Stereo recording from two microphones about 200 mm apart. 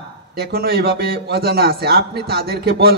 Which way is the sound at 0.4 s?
50° right (ahead or behind).